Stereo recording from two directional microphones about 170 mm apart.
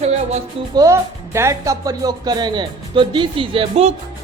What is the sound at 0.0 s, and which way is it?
Music, 40° right (ahead or behind).